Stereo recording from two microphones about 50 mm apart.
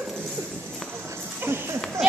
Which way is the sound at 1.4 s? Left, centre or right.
Right.